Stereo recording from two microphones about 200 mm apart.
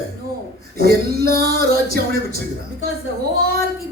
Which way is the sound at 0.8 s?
50° right (ahead or behind).